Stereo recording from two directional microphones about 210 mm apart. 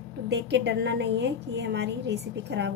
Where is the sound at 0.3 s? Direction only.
55° right (ahead or behind).